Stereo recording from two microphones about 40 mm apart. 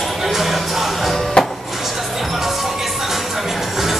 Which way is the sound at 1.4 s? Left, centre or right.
Left.